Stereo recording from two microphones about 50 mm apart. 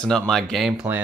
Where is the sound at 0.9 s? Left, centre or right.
Right.